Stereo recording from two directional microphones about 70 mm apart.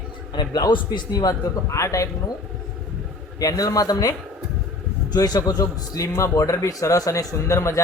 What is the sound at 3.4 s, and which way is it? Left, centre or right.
A man's voice, left.